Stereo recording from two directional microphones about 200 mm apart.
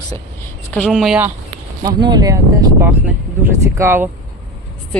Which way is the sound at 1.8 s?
20° right (ahead or behind).